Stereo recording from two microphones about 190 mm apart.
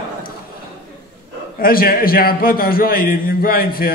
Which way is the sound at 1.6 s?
50° left (ahead or behind).